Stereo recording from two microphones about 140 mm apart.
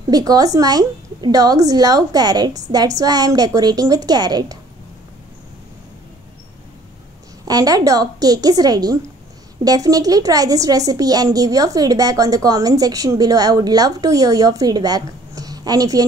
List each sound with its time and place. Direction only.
0.1 s a woman's voice: 25° right (ahead or behind)
7.4 s a woman's voice: 25° right (ahead or behind)